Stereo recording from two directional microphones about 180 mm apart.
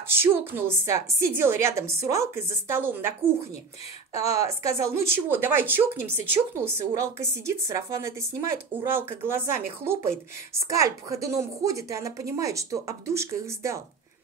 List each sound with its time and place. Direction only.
0.2 s a woman's voice: 10° right (ahead or behind)